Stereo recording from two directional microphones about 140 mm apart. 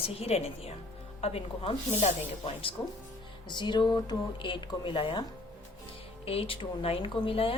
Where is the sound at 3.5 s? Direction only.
35° left (ahead or behind).